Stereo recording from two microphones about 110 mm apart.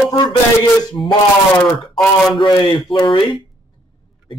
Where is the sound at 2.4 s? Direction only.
45° left (ahead or behind).